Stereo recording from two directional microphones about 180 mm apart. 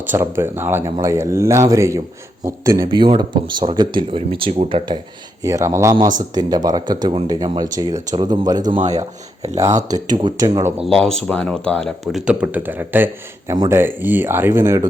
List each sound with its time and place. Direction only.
0.0 s speech: 10° right (ahead or behind); by 4.9 s 30° right (ahead or behind)
5.4 s speech: 15° right (ahead or behind)
10.8 s speech: 5° left (ahead or behind); by 14.8 s 15° right (ahead or behind)